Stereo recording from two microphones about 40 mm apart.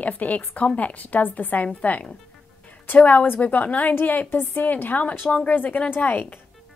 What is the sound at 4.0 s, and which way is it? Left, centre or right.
Speech, left.